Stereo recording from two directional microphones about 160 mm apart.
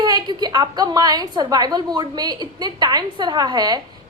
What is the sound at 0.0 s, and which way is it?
A woman's voice, 25° right (ahead or behind).